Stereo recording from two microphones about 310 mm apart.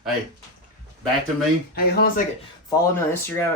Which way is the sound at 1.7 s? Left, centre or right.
Left.